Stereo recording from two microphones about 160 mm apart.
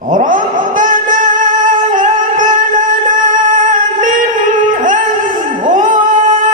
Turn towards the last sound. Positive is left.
turn(degrees=-55)  # may be behind; listen again after turning